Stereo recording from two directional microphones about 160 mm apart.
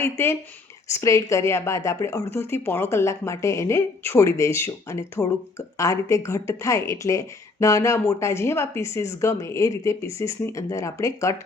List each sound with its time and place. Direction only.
0.0 s speech: 15° left (ahead or behind)